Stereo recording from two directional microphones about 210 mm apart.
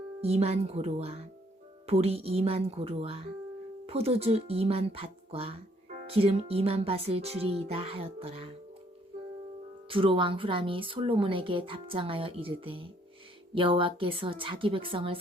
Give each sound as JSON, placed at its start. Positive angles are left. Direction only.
{"t": 0.2, "sound": "speech", "side_deg": -30}
{"t": 9.9, "sound": "speech", "side_deg": -25}